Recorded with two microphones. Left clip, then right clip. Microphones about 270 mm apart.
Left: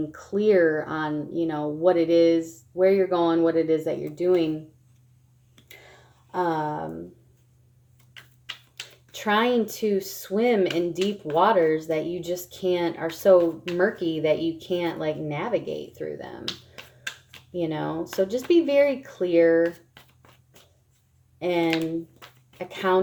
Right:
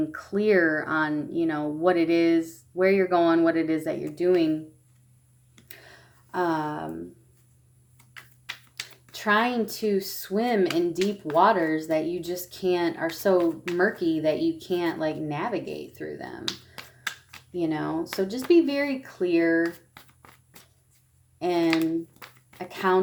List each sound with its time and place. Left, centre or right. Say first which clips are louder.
0.1 s speech: left 4 dB; right
6.3 s speech: left 1 dB; right
8.1 s a sound: even; centre
9.6 s speech: left 1 dB; right
21.4 s speech: even; centre